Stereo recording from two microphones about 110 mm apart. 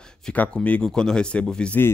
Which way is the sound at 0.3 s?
10° left (ahead or behind).